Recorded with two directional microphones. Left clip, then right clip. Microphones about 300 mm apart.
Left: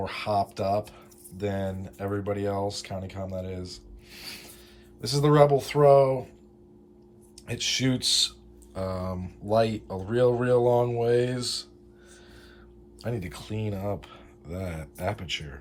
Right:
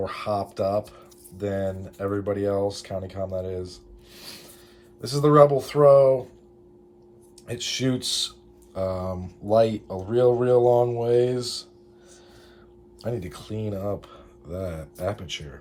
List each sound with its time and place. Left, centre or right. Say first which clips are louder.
0.0 s speech: even; centre
7.4 s speech: even; centre
13.0 s speech: right 3 dB; centre